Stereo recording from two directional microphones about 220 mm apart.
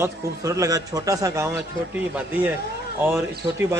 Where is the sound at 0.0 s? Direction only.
15° right (ahead or behind).